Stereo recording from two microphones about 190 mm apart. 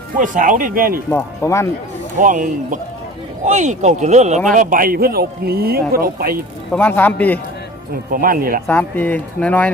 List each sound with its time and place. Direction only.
0.2 s a man's voice: 45° right (ahead or behind)
1.1 s speech: 15° left (ahead or behind)
2.1 s a man's voice: 40° right (ahead or behind)
6.7 s speech: 10° left (ahead or behind)
8.1 s a man's voice: 50° right (ahead or behind)
8.6 s speech: 10° left (ahead or behind)